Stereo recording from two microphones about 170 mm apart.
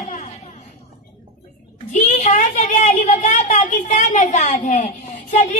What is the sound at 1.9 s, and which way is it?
A woman's voice, 45° left (ahead or behind).